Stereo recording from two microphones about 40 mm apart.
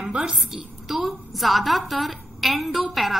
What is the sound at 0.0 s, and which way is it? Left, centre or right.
Speech, centre.